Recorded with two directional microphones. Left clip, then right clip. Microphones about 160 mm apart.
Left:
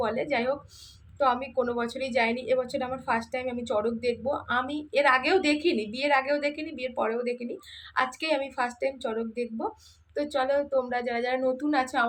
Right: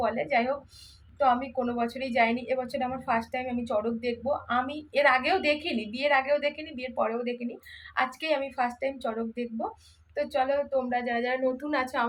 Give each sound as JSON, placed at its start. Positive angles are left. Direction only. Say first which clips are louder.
{"t": 0.0, "sound": "a woman's voice", "louder": "right 1 dB", "side_deg": 25}